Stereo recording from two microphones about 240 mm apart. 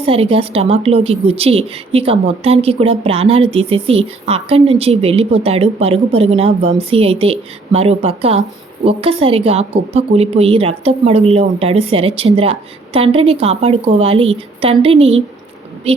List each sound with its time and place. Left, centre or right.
0.0 s a woman's voice: right